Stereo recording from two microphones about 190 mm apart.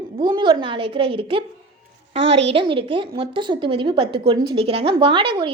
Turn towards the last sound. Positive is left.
turn(degrees=-25)  # may be behind; listen again after turning